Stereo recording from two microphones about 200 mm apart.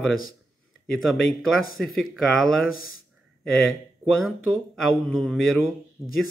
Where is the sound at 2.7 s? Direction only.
90° left.